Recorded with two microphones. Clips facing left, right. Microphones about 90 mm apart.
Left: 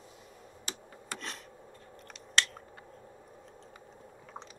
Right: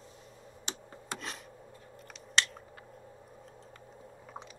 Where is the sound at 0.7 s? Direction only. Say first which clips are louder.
Right 1 dB; 25° right (ahead or behind).